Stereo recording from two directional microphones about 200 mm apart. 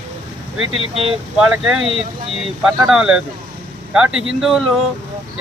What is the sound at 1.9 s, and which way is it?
Speech, 30° right (ahead or behind).